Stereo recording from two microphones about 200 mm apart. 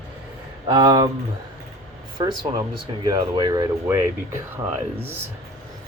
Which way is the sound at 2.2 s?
20° right (ahead or behind).